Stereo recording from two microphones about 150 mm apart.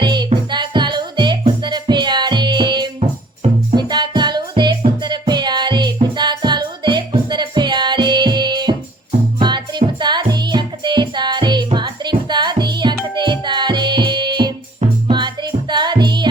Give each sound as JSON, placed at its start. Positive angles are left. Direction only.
{"t": 0.0, "sound": "music", "side_deg": -30}
{"t": 3.4, "sound": "music", "side_deg": -45}
{"t": 3.8, "sound": "music", "side_deg": -30}
{"t": 15.7, "sound": "music", "side_deg": -30}